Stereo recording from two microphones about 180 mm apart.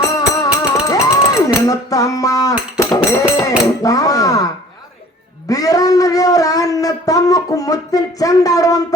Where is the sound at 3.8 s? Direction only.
20° left (ahead or behind).